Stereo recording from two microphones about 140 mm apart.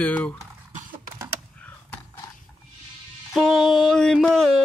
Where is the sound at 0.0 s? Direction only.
10° left (ahead or behind).